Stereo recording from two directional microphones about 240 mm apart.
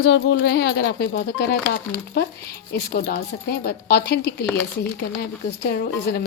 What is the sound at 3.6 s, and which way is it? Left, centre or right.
Speech, left.